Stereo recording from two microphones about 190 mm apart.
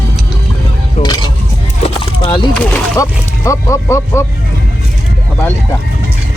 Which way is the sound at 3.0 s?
15° left (ahead or behind).